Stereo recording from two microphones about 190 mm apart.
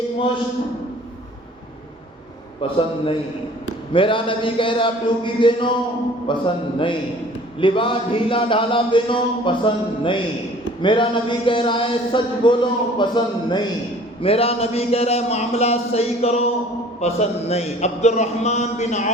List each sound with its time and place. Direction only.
2.6 s speech: 30° left (ahead or behind)